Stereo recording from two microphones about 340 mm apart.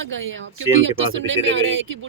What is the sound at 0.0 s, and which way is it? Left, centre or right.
Speech, right.